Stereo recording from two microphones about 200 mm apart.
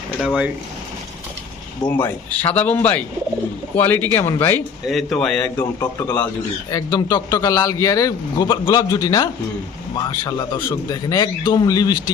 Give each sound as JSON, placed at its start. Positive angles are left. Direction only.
{"t": 0.2, "sound": "a man's voice", "side_deg": -5}
{"t": 1.9, "sound": "a man's voice", "side_deg": 10}